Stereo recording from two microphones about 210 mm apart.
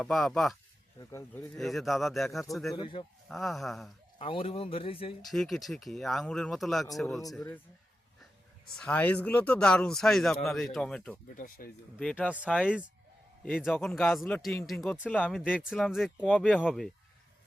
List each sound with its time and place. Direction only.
0.0 s speech: 5° left (ahead or behind)
0.9 s speech: 15° left (ahead or behind)
1.5 s speech: centre (ahead or behind)
2.7 s a man's voice: 20° left (ahead or behind)
3.2 s speech: centre (ahead or behind)
4.2 s a man's voice: 25° left (ahead or behind)
5.2 s speech: centre (ahead or behind)
8.8 s speech: 5° left (ahead or behind)
11.3 s speech: 40° left (ahead or behind)
11.9 s speech: 5° left (ahead or behind)